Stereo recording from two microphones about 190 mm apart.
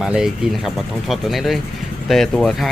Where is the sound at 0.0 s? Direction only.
5° right (ahead or behind).